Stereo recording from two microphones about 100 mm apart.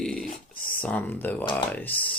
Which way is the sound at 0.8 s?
15° left (ahead or behind).